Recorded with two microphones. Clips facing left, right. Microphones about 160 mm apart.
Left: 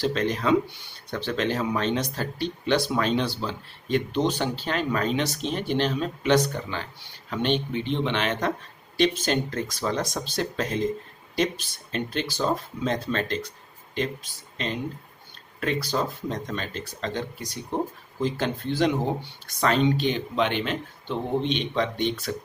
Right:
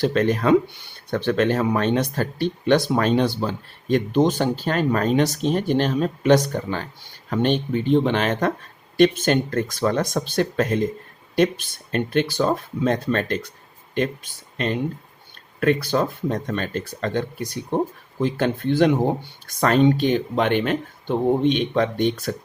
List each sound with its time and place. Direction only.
0.0 s speech: 50° right (ahead or behind)
15.6 s speech: 55° right (ahead or behind)